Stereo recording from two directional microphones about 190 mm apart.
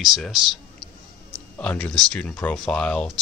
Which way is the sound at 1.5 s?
5° left (ahead or behind).